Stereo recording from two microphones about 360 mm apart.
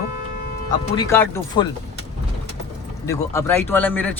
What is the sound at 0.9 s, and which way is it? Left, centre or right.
Speech, centre.